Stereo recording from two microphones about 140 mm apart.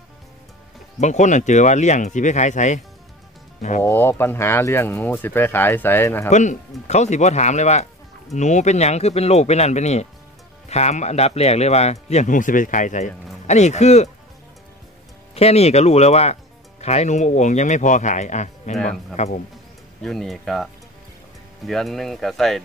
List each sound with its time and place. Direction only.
1.0 s speech: 60° left (ahead or behind)
3.8 s speech: 15° left (ahead or behind)
6.3 s speech: 60° left (ahead or behind)
15.3 s speech: 50° left (ahead or behind)
20.0 s speech: centre (ahead or behind)